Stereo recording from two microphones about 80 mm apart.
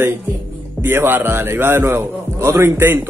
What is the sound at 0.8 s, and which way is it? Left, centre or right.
A man's voice, right.